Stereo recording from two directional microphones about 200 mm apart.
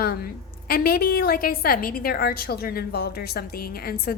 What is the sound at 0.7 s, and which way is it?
A woman's voice, 50° left (ahead or behind).